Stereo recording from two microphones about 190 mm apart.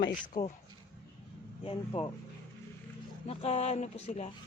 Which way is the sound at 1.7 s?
30° left (ahead or behind).